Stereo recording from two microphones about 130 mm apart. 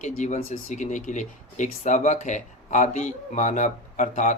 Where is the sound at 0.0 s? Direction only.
65° left (ahead or behind).